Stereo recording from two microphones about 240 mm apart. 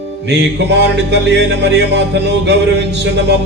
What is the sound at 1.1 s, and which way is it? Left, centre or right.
Music, right.